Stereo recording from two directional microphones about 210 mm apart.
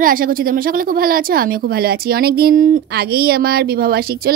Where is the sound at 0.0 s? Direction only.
40° right (ahead or behind).